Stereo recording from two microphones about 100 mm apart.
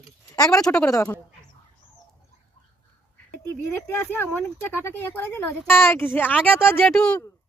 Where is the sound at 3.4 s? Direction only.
20° left (ahead or behind).